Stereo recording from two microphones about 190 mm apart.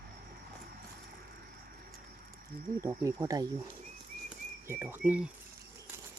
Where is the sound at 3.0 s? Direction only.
20° right (ahead or behind).